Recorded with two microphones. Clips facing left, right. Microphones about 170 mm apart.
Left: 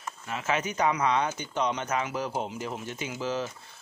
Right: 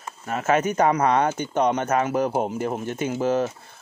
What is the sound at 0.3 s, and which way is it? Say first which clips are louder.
Speech: right 8 dB; 45° right (ahead or behind).